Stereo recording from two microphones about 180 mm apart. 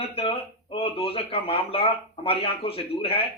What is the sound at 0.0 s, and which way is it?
Speech, 30° left (ahead or behind).